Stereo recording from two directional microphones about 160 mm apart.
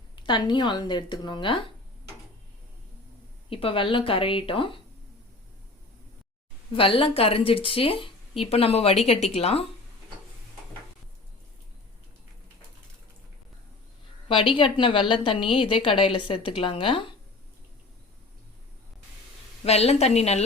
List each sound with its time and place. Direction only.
0.2 s speech: 30° left (ahead or behind)
3.5 s a woman's voice: 35° left (ahead or behind)
6.7 s a woman's voice: 35° left (ahead or behind)
14.3 s a woman's voice: 35° left (ahead or behind)
19.6 s a woman's voice: 40° left (ahead or behind)